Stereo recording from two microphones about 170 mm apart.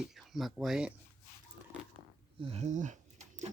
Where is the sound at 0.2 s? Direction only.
Centre (ahead or behind).